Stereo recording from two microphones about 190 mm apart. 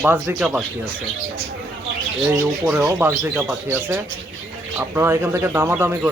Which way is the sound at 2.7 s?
15° right (ahead or behind).